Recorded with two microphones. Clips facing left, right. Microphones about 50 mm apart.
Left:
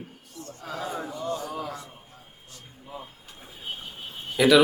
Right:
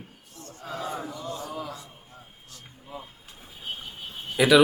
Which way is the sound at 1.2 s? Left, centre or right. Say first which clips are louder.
Left 4 dB; left.